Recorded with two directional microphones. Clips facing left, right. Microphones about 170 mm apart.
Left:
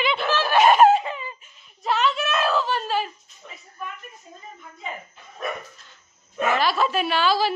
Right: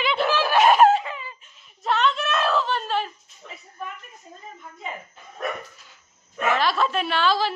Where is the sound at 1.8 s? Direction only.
5° left (ahead or behind).